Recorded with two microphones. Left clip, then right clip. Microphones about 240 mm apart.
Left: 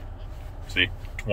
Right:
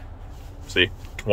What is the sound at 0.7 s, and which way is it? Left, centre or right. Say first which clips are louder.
Speech: right 3 dB; right.